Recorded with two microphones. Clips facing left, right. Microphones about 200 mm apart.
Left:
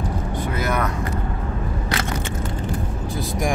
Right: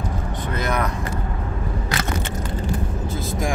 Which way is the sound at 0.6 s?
5° left (ahead or behind).